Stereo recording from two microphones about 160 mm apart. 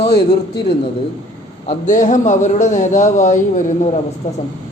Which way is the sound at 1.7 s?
50° left (ahead or behind).